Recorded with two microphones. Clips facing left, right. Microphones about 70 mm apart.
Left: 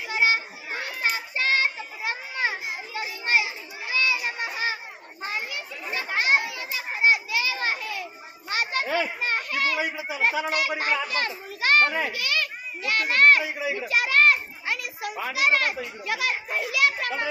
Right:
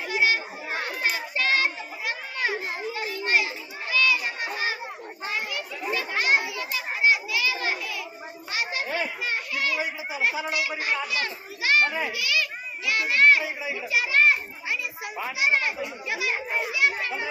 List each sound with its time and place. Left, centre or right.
0.1 s children playing: left
16.0 s chatter: left
16.7 s children playing: left